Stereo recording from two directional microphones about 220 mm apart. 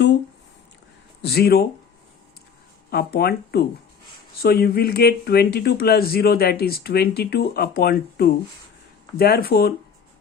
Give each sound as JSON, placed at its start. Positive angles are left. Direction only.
{"t": 1.2, "sound": "speech", "side_deg": 45}
{"t": 2.9, "sound": "speech", "side_deg": 45}